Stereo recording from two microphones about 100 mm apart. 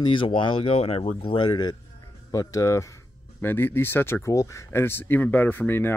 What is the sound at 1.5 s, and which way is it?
Speech, 45° left (ahead or behind).